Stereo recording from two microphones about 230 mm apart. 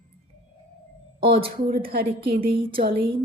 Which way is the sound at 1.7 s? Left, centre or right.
Right.